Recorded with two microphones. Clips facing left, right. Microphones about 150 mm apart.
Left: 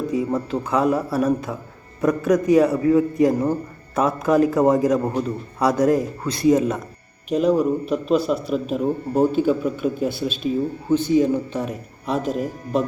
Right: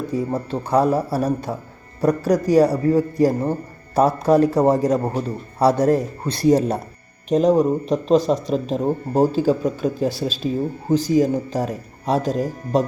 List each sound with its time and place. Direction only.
0.3 s speech: 35° right (ahead or behind)